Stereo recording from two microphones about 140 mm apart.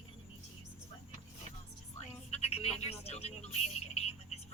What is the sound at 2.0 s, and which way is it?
Music, 45° left (ahead or behind).